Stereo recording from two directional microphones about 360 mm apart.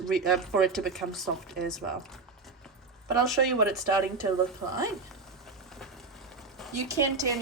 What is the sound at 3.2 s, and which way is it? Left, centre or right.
Speech, centre.